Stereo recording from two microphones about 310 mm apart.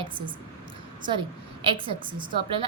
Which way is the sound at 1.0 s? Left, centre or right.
Centre.